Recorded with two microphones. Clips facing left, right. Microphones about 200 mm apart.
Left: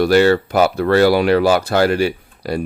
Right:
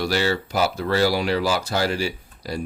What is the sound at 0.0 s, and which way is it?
Speech, 55° left (ahead or behind).